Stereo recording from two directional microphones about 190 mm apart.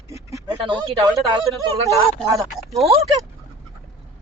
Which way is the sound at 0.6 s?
25° right (ahead or behind).